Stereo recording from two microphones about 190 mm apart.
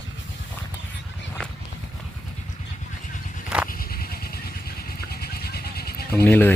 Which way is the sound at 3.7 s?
50° left (ahead or behind).